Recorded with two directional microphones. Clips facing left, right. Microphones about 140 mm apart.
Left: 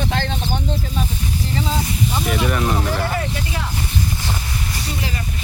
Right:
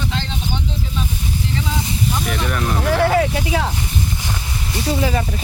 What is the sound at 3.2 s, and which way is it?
Speech, 90° right.